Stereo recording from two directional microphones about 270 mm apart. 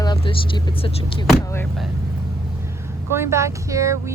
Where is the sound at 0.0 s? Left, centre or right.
Centre.